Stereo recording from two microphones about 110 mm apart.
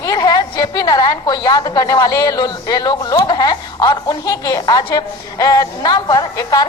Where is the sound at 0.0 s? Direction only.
35° left (ahead or behind).